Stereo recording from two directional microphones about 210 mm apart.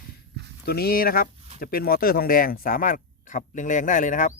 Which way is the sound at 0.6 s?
50° left (ahead or behind).